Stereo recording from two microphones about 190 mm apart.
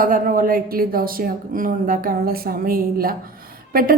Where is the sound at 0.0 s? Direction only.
45° right (ahead or behind).